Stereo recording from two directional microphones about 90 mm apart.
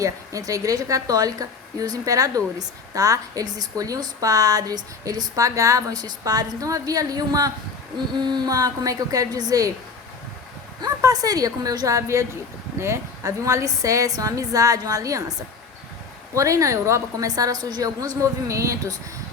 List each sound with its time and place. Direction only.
0.0 s a woman's voice: 35° right (ahead or behind)
10.8 s a woman's voice: 45° right (ahead or behind)
16.3 s speech: 35° right (ahead or behind)